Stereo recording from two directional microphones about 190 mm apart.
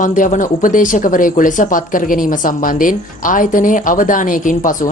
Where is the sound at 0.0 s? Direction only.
40° left (ahead or behind).